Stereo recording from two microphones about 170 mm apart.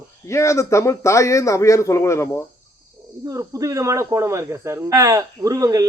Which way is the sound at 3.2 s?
20° right (ahead or behind).